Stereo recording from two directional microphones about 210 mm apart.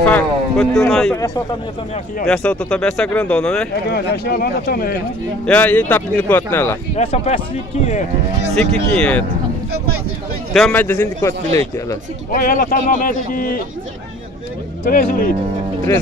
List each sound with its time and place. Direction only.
0.0 s speech: 5° left (ahead or behind)
2.2 s speech: 5° left (ahead or behind)
3.9 s speech: 45° left (ahead or behind)
5.5 s speech: 5° left (ahead or behind)
7.0 s speech: 30° left (ahead or behind)
8.9 s speech: 5° left (ahead or behind)
10.5 s speech: 5° left (ahead or behind)
12.4 s speech: 45° left (ahead or behind)
14.9 s speech: 45° left (ahead or behind)